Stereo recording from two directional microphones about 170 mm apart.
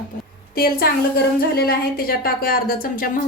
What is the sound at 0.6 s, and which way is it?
Speech, 65° left (ahead or behind).